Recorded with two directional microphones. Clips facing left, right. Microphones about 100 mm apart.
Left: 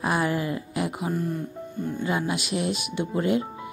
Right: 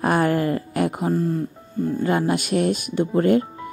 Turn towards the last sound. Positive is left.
turn(degrees=-45)  # may be behind; listen again after turning